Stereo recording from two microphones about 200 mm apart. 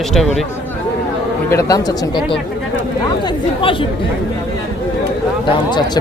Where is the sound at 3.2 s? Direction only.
25° left (ahead or behind).